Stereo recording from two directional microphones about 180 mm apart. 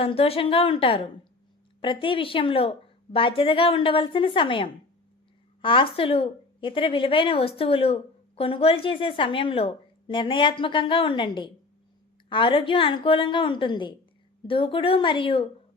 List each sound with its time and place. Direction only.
0.0 s a woman's voice: 35° left (ahead or behind)